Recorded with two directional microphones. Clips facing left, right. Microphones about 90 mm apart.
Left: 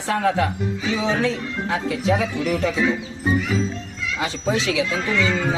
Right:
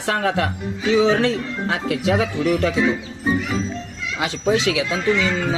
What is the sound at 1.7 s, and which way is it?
Speech, 75° right (ahead or behind).